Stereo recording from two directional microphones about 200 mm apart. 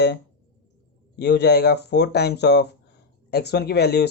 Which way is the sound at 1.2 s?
55° left (ahead or behind).